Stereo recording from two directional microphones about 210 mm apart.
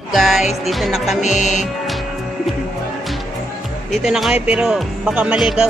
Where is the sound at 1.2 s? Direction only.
35° left (ahead or behind).